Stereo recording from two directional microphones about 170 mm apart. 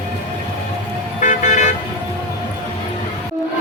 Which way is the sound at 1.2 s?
45° left (ahead or behind).